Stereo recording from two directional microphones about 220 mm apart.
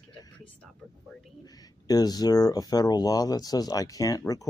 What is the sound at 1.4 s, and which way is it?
Speech, 15° left (ahead or behind).